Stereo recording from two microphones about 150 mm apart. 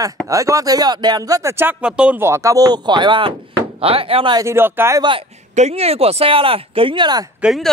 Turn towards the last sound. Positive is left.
turn(degrees=0)  # may be behind; listen again after turning